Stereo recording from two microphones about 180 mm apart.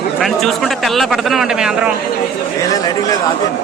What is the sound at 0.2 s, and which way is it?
Speech, centre (ahead or behind).